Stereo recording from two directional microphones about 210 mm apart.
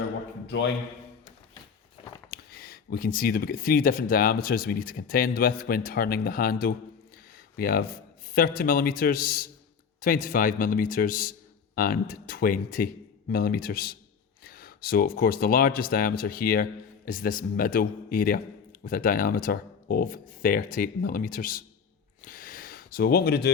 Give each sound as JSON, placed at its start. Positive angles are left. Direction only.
{"t": 0.4, "sound": "a man's voice", "side_deg": 60}
{"t": 2.3, "sound": "speech", "side_deg": 45}
{"t": 22.2, "sound": "a sound", "side_deg": 40}